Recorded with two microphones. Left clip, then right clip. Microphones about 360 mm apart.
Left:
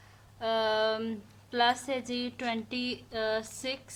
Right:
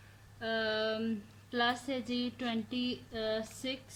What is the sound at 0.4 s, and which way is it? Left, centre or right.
Speech, centre.